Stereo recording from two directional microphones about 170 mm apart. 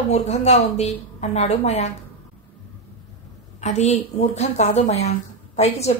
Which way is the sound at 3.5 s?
40° left (ahead or behind).